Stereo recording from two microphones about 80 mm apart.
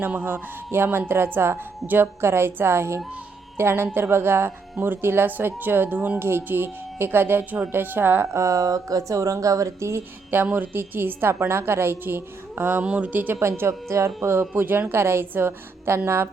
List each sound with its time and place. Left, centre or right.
0.0 s a woman's voice: right
10.3 s speech: right
13.6 s a woman's voice: right